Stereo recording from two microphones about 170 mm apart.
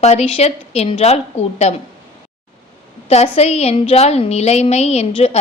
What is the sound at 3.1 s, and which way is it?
A woman's voice, 40° left (ahead or behind).